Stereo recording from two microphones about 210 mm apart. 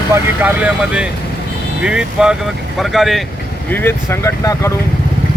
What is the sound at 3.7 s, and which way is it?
Speech, 10° left (ahead or behind).